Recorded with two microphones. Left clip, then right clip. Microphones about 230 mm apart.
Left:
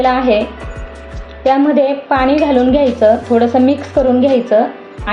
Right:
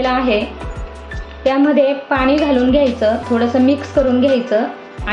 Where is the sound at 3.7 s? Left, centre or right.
Centre.